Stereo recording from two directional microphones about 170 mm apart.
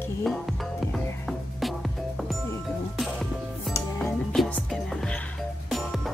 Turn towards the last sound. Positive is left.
turn(degrees=0)  # may be behind; listen again after turning